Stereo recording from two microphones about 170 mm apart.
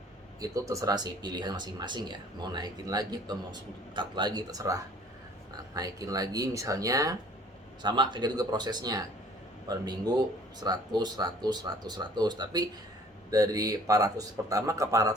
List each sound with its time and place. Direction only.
0.3 s speech: 20° right (ahead or behind)